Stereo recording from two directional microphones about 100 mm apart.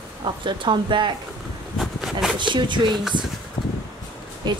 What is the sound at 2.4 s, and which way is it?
Speech, 50° right (ahead or behind).